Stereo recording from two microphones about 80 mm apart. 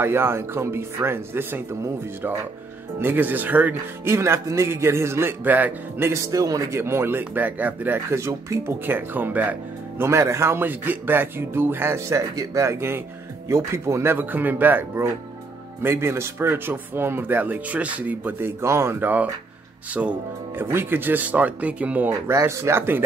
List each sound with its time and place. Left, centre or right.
0.0 s speech: right
3.0 s speech: right
4.1 s speech: right
6.8 s speech: right
8.1 s speech: right
10.0 s speech: right
14.1 s speech: right
20.5 s speech: right
22.3 s speech: right